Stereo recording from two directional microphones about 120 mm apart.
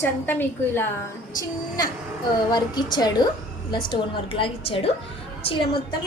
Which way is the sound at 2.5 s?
35° left (ahead or behind).